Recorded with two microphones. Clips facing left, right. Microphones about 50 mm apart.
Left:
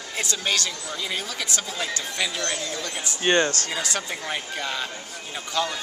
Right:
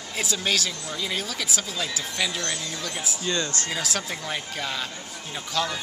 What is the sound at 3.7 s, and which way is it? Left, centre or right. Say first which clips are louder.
Speech: left 1 dB; centre.